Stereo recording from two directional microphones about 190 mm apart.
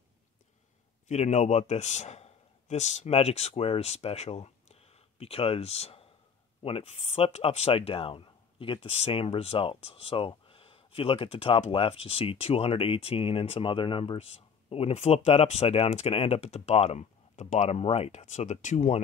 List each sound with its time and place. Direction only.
1.0 s speech: 35° left (ahead or behind)